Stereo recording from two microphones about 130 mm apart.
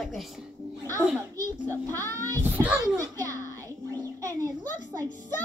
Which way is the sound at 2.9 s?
25° right (ahead or behind).